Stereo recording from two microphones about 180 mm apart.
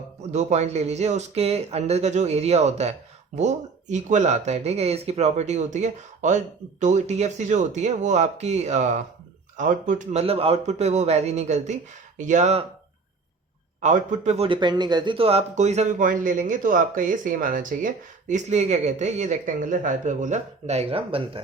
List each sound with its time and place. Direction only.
0.2 s a man's voice: 40° right (ahead or behind)
13.8 s a man's voice: 45° right (ahead or behind)